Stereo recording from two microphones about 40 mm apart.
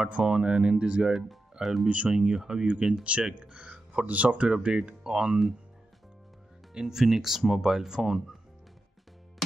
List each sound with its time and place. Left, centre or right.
0.0 s speech: right
1.6 s speech: centre
2.0 s speech: right
6.7 s speech: centre